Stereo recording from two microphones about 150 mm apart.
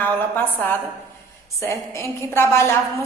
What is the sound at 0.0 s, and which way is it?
Speech, 10° left (ahead or behind).